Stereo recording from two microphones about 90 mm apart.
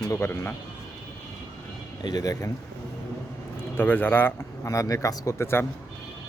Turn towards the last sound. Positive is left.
turn(degrees=25)  # may be behind; listen again after turning